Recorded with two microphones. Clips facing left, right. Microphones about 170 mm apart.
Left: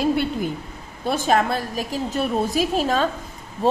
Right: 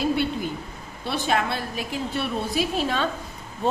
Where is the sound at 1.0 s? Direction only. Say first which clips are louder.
Left 5 dB; 45° left (ahead or behind).